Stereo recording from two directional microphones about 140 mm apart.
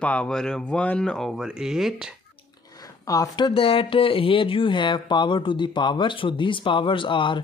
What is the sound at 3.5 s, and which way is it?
Speech, 40° left (ahead or behind).